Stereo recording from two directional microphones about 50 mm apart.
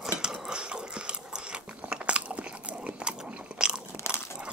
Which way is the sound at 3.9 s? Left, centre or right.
Left.